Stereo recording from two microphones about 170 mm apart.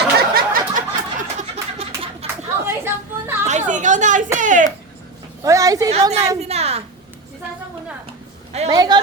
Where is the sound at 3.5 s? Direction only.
45° right (ahead or behind).